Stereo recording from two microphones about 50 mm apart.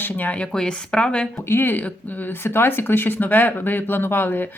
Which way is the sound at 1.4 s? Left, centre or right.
Left.